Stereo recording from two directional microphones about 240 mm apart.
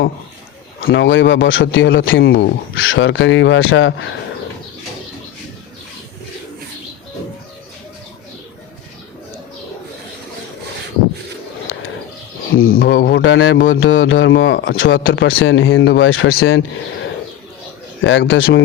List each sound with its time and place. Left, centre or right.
0.9 s speech: left
12.8 s speech: left
18.0 s speech: left